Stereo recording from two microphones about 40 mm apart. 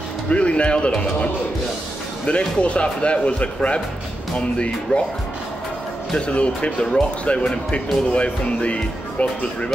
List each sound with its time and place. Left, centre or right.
0.3 s speech: left
6.1 s speech: left